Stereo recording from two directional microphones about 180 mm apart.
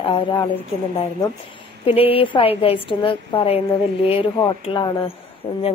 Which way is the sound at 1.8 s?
30° left (ahead or behind).